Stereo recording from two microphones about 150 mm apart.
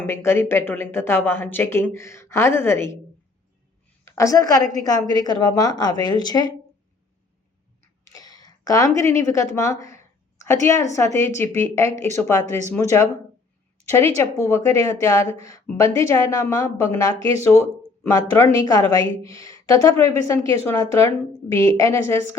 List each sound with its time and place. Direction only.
0.0 s a woman's voice: 15° left (ahead or behind)
4.0 s a woman's voice: 20° left (ahead or behind)
8.1 s a sound: 25° left (ahead or behind)
9.0 s a woman's voice: 20° left (ahead or behind)